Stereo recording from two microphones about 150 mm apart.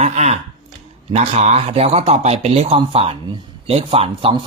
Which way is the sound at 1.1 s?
45° right (ahead or behind).